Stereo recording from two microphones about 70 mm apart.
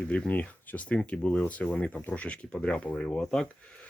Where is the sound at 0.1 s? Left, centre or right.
Centre.